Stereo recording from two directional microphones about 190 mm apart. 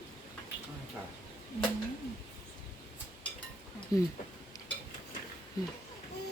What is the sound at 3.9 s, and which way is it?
Speech, 20° left (ahead or behind).